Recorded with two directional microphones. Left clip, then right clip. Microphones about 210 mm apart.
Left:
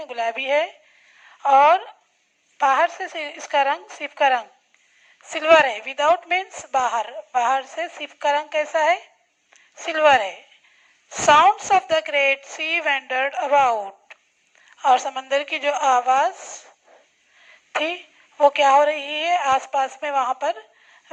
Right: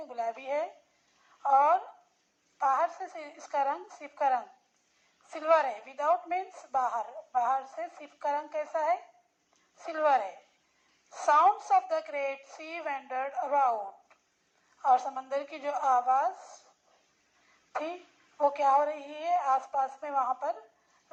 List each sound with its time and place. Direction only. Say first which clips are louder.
0.2 s a woman's voice: left 11 dB; 40° left (ahead or behind)
11.3 s a woman's voice: left 6 dB; 45° left (ahead or behind)
18.3 s a woman's voice: left 10 dB; 40° left (ahead or behind)